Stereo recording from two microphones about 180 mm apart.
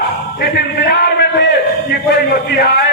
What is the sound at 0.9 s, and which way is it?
Speech, 70° left (ahead or behind).